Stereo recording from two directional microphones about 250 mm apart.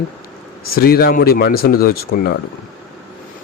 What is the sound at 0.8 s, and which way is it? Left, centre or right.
A man's voice, left.